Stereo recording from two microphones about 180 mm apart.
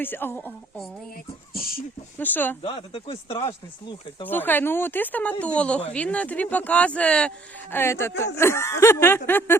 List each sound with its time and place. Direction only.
0.0 s speech: 10° left (ahead or behind)
1.1 s a sound: 55° left (ahead or behind)
2.1 s speech: 10° left (ahead or behind)
2.6 s speech: 30° left (ahead or behind)
4.3 s speech: 10° left (ahead or behind)